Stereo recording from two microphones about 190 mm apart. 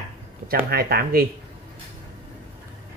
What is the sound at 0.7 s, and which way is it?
Speech, 55° right (ahead or behind).